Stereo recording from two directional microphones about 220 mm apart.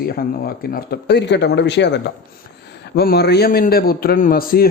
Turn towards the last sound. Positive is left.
turn(degrees=40)  # may be behind; listen again after turning